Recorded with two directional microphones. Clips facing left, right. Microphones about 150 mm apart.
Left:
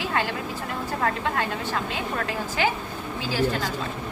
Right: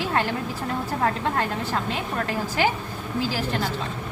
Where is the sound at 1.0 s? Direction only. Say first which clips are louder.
Right 1 dB; 35° right (ahead or behind).